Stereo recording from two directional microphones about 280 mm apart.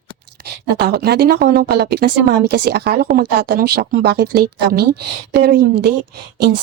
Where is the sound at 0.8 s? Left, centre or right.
Right.